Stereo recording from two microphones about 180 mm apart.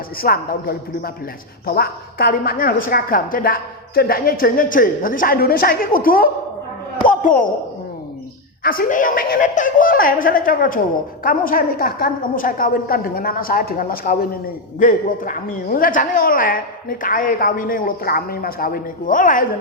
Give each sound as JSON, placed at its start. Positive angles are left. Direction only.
{"t": 0.2, "sound": "a woman's voice", "side_deg": 55}
{"t": 7.1, "sound": "a sound", "side_deg": 50}
{"t": 8.6, "sound": "a woman's voice", "side_deg": 55}